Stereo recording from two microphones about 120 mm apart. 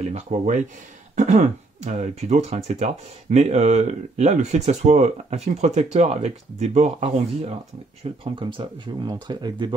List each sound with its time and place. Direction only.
0.1 s speech: 75° right (ahead or behind)
8.0 s speech: 45° right (ahead or behind)